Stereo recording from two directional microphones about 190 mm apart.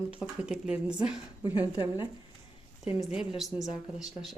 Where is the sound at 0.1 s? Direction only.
5° right (ahead or behind).